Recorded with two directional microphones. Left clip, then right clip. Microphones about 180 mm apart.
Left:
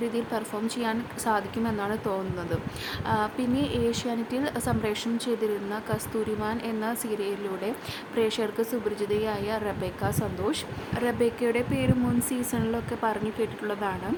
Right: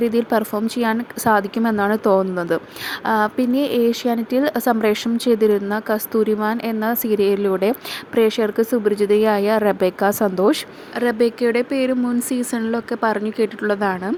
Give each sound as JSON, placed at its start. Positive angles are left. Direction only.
{"t": 0.0, "sound": "a woman's voice", "side_deg": -35}
{"t": 10.9, "sound": "a woman's voice", "side_deg": -25}